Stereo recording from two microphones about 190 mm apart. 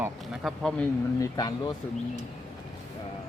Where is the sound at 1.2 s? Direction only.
20° left (ahead or behind).